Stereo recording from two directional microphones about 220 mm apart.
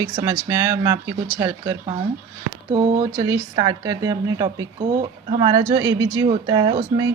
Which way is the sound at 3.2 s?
20° right (ahead or behind).